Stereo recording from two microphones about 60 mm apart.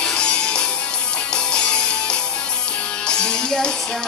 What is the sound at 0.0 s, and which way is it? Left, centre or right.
Music, centre.